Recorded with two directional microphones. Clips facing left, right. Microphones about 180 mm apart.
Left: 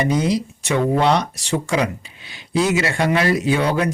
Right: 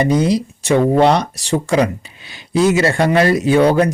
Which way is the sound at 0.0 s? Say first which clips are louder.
Right 4 dB; 35° right (ahead or behind).